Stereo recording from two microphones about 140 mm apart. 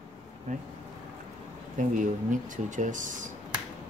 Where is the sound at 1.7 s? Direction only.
65° right (ahead or behind).